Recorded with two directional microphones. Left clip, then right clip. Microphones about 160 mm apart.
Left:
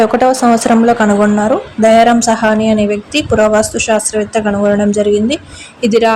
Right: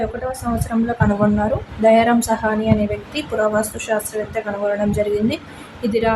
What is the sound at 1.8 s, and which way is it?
A woman's voice, 30° left (ahead or behind).